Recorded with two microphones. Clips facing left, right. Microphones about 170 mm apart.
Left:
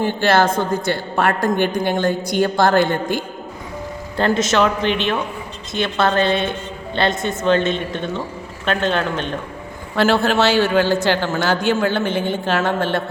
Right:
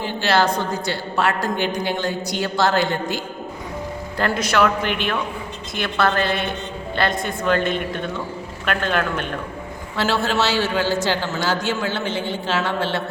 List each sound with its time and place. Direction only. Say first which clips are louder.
0.0 s a woman's voice: left 3 dB; 50° left (ahead or behind)
4.2 s a woman's voice: left 3 dB; 25° left (ahead or behind)
9.9 s a man's voice: left 5 dB; 55° left (ahead or behind)